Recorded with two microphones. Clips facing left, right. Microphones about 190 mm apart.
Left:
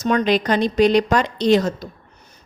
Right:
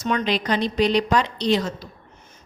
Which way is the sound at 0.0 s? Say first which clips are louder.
Left 5 dB; 40° left (ahead or behind).